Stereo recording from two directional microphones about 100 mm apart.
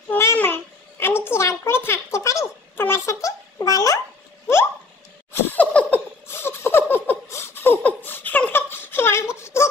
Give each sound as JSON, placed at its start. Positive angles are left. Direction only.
{"t": 0.1, "sound": "babbling", "side_deg": 20}
{"t": 5.3, "sound": "a sound", "side_deg": 15}
{"t": 6.2, "sound": "laughter", "side_deg": 25}